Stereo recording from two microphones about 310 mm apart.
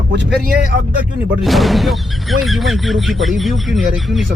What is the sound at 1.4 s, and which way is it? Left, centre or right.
Speech, centre.